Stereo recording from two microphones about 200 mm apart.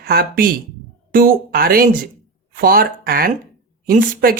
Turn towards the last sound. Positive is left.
turn(degrees=-45)  # may be behind; listen again after turning